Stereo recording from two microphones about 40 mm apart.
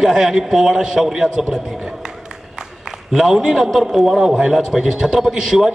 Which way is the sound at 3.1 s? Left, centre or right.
Centre.